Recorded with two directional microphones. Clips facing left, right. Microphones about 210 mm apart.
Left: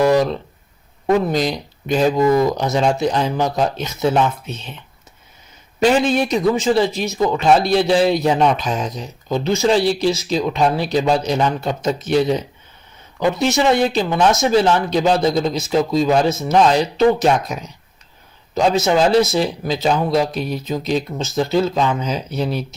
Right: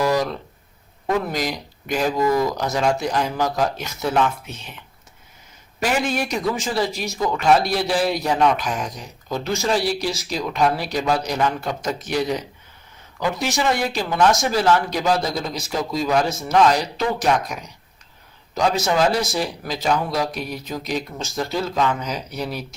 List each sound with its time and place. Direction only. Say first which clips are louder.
0.1 s a sound: left 6 dB; 20° left (ahead or behind)
1.0 s speech: left 6 dB; 25° left (ahead or behind)
5.8 s speech: left 7 dB; 25° left (ahead or behind)